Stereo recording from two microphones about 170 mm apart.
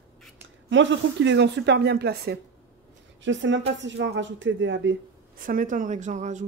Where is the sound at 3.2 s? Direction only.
90° right.